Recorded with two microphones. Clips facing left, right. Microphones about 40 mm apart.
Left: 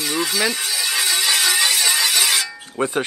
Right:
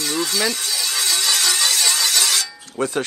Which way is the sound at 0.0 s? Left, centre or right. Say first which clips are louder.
Left 1 dB; centre.